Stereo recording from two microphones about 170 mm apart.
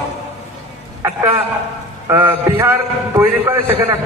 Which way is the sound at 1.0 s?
15° right (ahead or behind).